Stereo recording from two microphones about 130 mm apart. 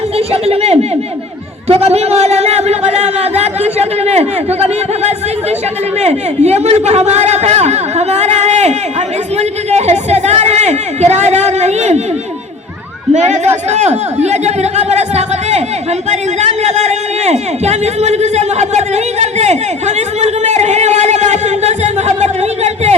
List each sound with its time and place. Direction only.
0.2 s a man's voice: 50° right (ahead or behind)
13.1 s speech: 60° right (ahead or behind)
17.6 s a sound: 55° right (ahead or behind)